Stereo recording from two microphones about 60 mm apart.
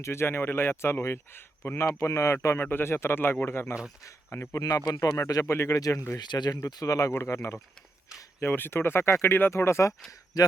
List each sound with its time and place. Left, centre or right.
0.0 s speech: left
2.6 s speech: left
4.5 s speech: left
4.9 s speech: left
5.5 s speech: left
5.7 s speech: left
7.1 s speech: left
8.4 s speech: left
10.3 s speech: left